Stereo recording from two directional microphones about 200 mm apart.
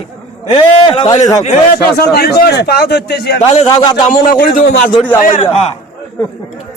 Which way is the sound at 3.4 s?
30° left (ahead or behind).